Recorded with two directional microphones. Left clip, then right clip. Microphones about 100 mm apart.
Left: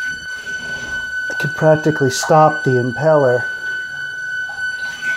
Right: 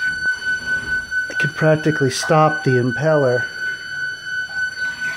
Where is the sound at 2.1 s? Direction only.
20° left (ahead or behind).